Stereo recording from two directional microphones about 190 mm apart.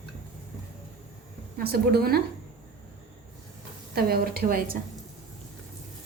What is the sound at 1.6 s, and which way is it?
Speech, 55° right (ahead or behind).